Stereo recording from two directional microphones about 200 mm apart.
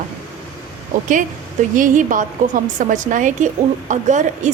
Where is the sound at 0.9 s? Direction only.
40° right (ahead or behind).